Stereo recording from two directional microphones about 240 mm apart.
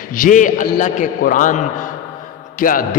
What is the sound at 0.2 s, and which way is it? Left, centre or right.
A man's voice, left.